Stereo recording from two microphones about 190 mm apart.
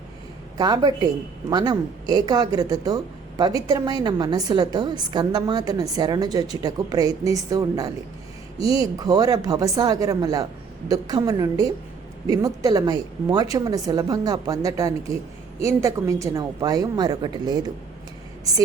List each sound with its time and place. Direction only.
0.5 s a woman's voice: 20° right (ahead or behind)